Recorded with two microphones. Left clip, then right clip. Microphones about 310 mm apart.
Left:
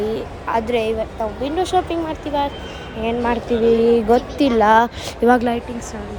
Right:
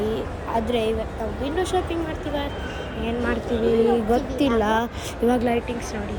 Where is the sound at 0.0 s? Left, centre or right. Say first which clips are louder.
Left 3 dB; centre.